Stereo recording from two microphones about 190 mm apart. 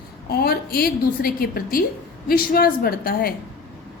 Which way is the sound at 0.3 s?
55° left (ahead or behind).